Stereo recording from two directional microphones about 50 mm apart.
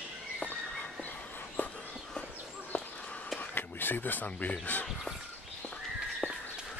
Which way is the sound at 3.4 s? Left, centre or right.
Left.